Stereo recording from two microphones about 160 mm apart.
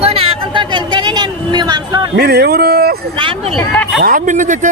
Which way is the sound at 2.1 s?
85° right.